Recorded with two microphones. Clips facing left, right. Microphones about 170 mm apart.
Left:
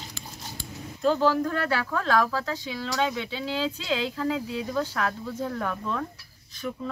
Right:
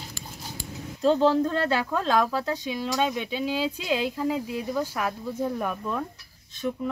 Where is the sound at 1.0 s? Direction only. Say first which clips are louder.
Right 2 dB; 30° right (ahead or behind).